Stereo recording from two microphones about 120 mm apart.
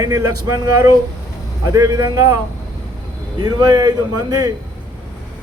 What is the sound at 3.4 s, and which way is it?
A man's voice, 30° right (ahead or behind).